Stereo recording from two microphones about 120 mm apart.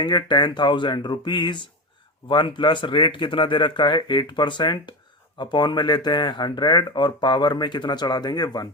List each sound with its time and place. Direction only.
0.0 s speech: 40° left (ahead or behind)